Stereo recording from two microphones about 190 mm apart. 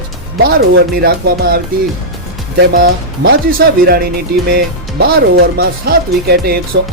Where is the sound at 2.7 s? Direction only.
50° right (ahead or behind).